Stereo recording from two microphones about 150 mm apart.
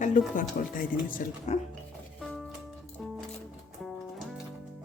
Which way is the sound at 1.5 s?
50° left (ahead or behind).